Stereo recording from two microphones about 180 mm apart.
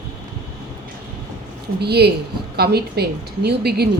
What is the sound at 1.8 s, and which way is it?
A woman's voice, 65° right (ahead or behind).